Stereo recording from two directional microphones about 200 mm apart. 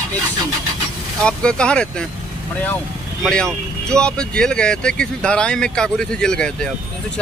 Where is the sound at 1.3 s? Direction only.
5° left (ahead or behind).